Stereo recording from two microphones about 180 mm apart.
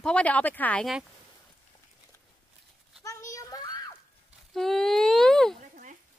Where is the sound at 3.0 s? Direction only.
20° left (ahead or behind).